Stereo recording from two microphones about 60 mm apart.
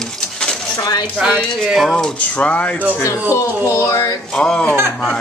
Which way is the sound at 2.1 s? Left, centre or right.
Left.